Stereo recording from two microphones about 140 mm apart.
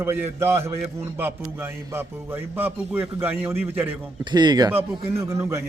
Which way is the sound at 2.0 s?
15° right (ahead or behind).